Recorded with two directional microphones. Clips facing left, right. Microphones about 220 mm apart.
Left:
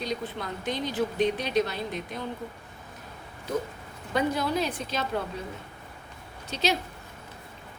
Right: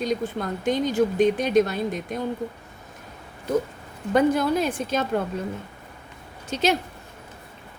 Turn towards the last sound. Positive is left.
turn(degrees=-50)  # may be behind; listen again after turning